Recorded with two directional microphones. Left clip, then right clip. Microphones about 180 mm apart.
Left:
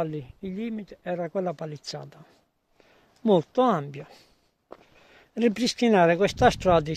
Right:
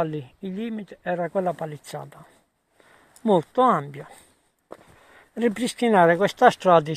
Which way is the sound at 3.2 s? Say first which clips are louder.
Right 3 dB; 40° left (ahead or behind).